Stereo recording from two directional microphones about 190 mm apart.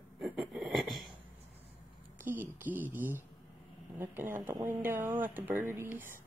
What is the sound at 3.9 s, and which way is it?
Speech, 10° right (ahead or behind).